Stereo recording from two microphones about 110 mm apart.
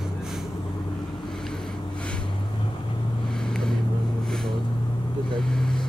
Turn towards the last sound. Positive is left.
turn(degrees=5)  # may be behind; listen again after turning